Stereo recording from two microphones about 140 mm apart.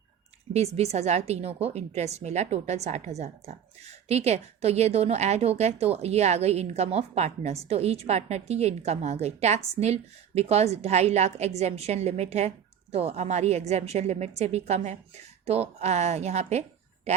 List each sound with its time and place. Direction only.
0.5 s a woman's voice: 50° right (ahead or behind)